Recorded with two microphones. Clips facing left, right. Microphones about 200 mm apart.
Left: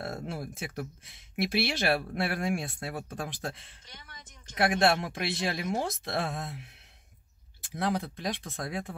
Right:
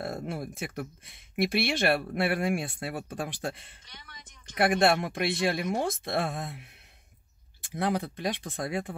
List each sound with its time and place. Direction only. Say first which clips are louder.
0.0 s speech: right 2 dB; centre (ahead or behind)
5.2 s speech: right 4 dB; 50° right (ahead or behind)
5.5 s speech: right 3 dB; centre (ahead or behind)
7.7 s speech: right 2 dB; centre (ahead or behind)